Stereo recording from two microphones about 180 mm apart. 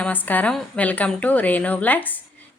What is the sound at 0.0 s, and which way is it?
A woman's voice, 10° left (ahead or behind).